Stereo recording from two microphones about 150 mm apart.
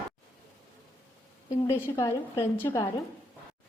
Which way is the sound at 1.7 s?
15° left (ahead or behind).